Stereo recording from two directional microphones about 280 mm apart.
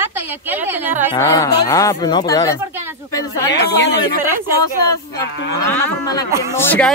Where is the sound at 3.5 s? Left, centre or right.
Left.